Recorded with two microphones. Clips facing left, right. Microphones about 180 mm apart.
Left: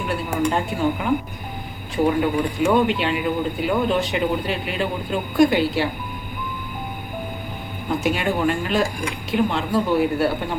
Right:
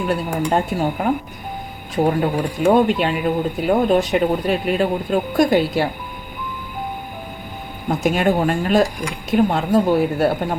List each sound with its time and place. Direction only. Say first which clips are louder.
0.5 s speech: right 2 dB; 45° right (ahead or behind)
7.9 s speech: right 4 dB; 45° right (ahead or behind)